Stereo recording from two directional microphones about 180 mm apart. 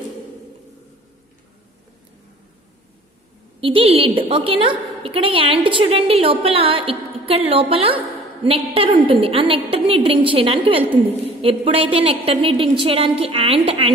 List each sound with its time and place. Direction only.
3.6 s a woman's voice: 30° right (ahead or behind)